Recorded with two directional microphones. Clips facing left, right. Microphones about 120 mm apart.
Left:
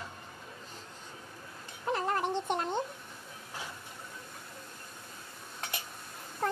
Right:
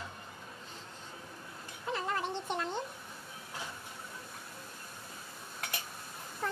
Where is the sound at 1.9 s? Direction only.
50° left (ahead or behind).